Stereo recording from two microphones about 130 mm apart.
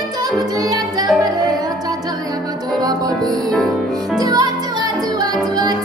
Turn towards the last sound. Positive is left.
turn(degrees=-30)  # may be behind; listen again after turning